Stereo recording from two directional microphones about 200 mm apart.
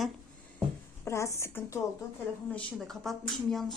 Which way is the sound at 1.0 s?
15° left (ahead or behind).